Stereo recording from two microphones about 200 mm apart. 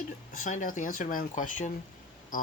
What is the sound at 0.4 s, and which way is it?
Speech, 40° left (ahead or behind).